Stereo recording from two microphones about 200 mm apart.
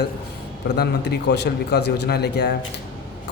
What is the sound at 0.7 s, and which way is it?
A man's voice, 55° left (ahead or behind).